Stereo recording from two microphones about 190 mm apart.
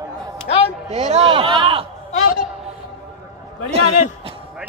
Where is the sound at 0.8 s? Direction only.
35° right (ahead or behind).